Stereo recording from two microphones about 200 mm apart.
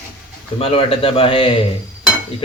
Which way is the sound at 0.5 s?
30° left (ahead or behind).